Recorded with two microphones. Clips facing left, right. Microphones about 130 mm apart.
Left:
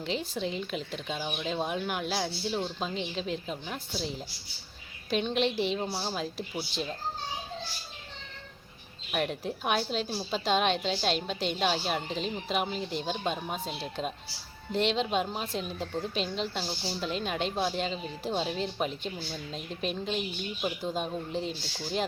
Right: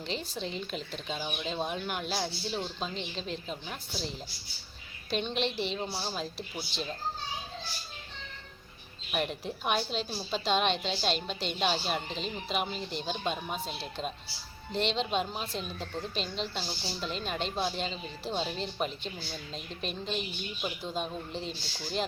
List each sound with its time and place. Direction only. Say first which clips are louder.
0.0 s a woman's voice: left 4 dB; 10° left (ahead or behind)
5.1 s a woman's voice: left 4 dB; 5° left (ahead or behind)
9.1 s a woman's voice: left 2 dB; 5° right (ahead or behind)
20.6 s a woman's voice: left 3 dB; 15° left (ahead or behind)